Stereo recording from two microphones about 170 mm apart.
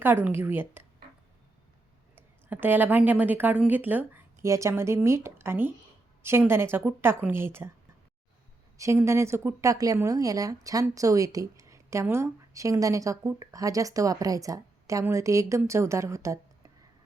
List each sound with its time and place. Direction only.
0.0 s a woman's voice: 10° right (ahead or behind)
2.1 s a woman's voice: 10° right (ahead or behind)
8.8 s speech: 15° right (ahead or behind)